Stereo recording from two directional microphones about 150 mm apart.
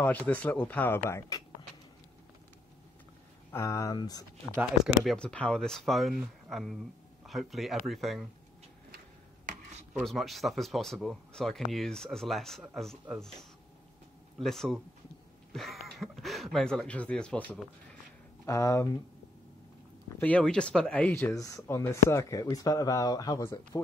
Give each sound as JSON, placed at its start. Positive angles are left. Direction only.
{"t": 0.0, "sound": "speech", "side_deg": 10}
{"t": 3.5, "sound": "speech", "side_deg": 20}
{"t": 4.6, "sound": "speech", "side_deg": 0}
{"t": 10.0, "sound": "speech", "side_deg": 0}
{"t": 14.4, "sound": "speech", "side_deg": 5}
{"t": 18.4, "sound": "speech", "side_deg": 20}
{"t": 20.2, "sound": "speech", "side_deg": 10}